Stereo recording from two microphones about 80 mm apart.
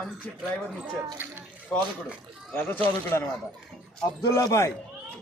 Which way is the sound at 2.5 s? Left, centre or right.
Left.